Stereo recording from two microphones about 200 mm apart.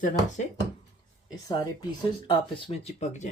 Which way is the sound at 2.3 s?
30° left (ahead or behind).